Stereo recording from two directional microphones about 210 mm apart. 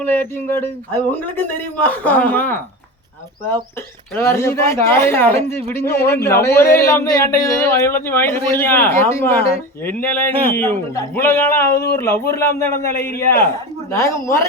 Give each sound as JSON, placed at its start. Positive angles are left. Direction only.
{"t": 0.0, "sound": "a man's voice", "side_deg": 10}
{"t": 4.1, "sound": "a man's voice", "side_deg": 10}